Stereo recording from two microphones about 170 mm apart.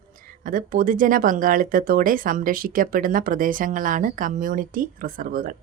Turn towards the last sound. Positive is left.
turn(degrees=-55)  # may be behind; listen again after turning